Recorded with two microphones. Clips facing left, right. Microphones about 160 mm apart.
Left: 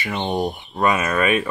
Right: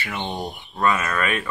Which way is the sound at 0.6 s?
20° left (ahead or behind).